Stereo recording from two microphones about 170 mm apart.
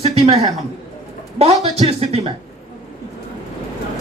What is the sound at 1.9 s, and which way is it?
Speech, 35° right (ahead or behind).